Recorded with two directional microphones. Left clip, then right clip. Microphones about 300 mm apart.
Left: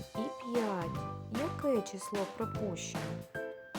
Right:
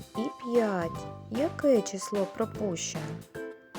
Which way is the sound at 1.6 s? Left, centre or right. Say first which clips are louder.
Right 9 dB; centre.